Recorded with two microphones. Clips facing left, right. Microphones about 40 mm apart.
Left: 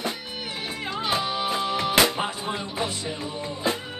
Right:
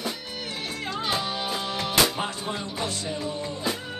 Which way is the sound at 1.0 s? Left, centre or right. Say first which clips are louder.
Left 4 dB; centre.